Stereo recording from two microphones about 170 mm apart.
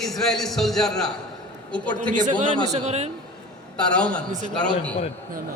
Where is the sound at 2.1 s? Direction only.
50° right (ahead or behind).